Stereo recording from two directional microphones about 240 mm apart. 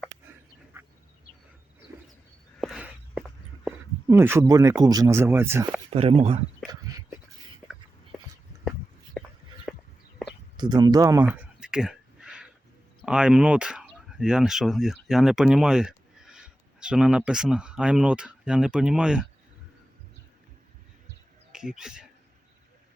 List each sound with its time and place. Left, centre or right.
2.6 s walk: centre
5.9 s speech: right
9.2 s a sound: centre
10.6 s speech: centre
11.3 s a sound: centre
13.0 s speech: centre
21.5 s speech: centre